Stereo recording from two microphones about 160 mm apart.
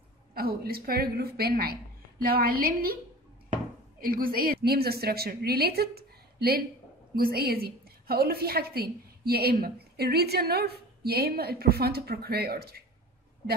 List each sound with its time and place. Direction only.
0.3 s a woman's voice: 70° right (ahead or behind)
4.0 s a woman's voice: 65° right (ahead or behind)